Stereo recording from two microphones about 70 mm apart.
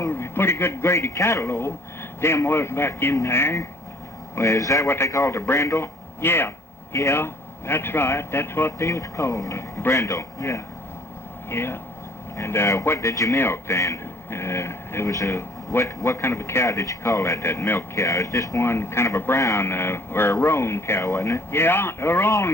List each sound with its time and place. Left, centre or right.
0.1 s a man's voice: left
4.4 s a man's voice: left
11.4 s a man's voice: left
13.3 s a man's voice: left
19.4 s a man's voice: left
19.6 s a man's voice: left